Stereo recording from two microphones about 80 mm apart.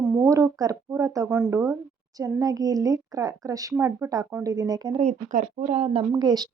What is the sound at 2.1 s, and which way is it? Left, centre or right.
Speech, right.